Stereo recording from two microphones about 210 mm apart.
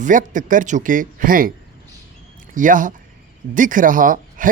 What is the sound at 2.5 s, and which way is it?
Speech, 40° right (ahead or behind).